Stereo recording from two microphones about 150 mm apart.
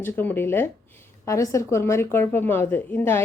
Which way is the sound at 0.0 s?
15° left (ahead or behind).